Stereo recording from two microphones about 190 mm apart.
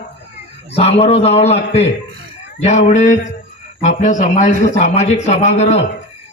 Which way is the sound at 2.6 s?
40° left (ahead or behind).